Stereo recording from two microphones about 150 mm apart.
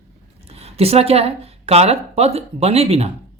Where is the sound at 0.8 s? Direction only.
40° right (ahead or behind).